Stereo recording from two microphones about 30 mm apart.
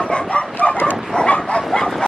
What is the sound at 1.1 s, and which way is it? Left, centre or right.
Bow-wow, left.